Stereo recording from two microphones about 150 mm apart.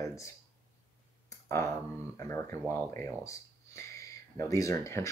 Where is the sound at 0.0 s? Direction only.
20° left (ahead or behind).